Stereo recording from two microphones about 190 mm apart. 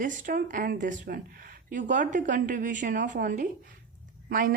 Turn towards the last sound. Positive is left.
turn(degrees=-45)  # may be behind; listen again after turning